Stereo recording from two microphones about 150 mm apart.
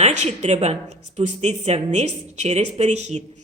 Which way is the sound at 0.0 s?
50° right (ahead or behind).